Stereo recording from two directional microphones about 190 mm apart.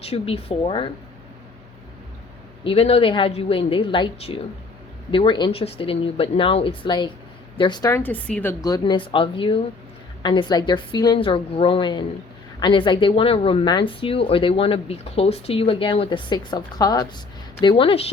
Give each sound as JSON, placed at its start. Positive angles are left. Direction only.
{"t": 0.0, "sound": "speech", "side_deg": 30}
{"t": 2.6, "sound": "speech", "side_deg": 30}